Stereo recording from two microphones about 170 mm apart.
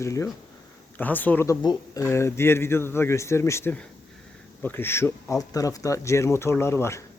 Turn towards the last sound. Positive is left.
turn(degrees=15)  # may be behind; listen again after turning